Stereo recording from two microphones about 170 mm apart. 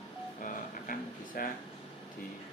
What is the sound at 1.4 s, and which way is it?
Speech, 55° left (ahead or behind).